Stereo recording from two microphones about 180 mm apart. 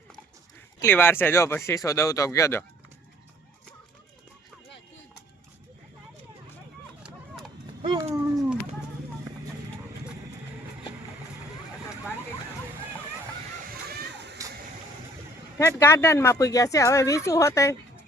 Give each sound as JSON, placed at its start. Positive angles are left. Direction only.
{"t": 0.8, "sound": "speech", "side_deg": 10}
{"t": 7.8, "sound": "a sound", "side_deg": -30}
{"t": 13.7, "sound": "water", "side_deg": -60}
{"t": 15.5, "sound": "speech", "side_deg": 15}